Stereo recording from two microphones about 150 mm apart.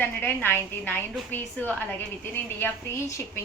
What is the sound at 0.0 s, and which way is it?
A woman's voice, 15° left (ahead or behind).